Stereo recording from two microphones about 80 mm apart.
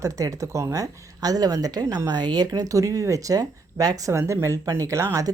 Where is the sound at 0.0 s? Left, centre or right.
Right.